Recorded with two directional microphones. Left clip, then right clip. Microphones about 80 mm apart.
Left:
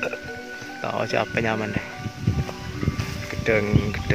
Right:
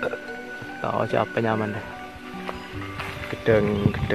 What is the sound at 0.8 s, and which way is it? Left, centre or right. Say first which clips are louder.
Speech: right 1 dB; centre.